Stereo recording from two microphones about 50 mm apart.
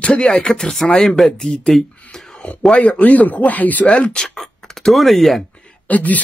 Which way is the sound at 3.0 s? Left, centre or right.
Left.